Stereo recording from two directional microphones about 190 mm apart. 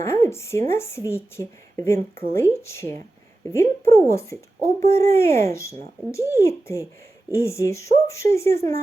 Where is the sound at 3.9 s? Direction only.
15° left (ahead or behind).